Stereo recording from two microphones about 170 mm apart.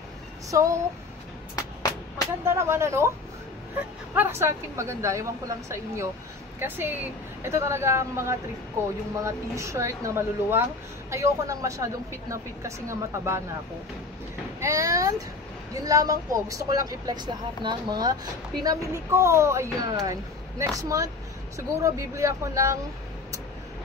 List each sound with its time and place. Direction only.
0.5 s a woman's voice: 15° right (ahead or behind)
1.5 s music: 20° left (ahead or behind)
2.4 s a woman's voice: 15° right (ahead or behind)
4.1 s a woman's voice: 15° right (ahead or behind)
14.6 s a woman's voice: 20° right (ahead or behind)